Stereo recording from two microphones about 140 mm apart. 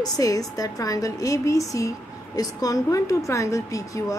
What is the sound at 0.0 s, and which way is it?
A woman's voice, 25° left (ahead or behind).